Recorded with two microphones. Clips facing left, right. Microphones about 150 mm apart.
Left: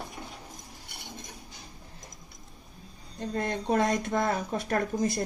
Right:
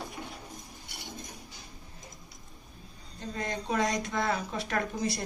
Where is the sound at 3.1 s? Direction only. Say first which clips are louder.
Left 4 dB; 55° left (ahead or behind).